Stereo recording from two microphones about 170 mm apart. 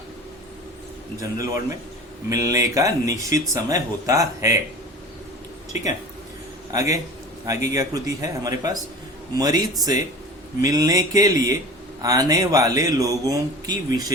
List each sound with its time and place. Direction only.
1.2 s speech: 20° right (ahead or behind)
7.4 s speech: 20° right (ahead or behind)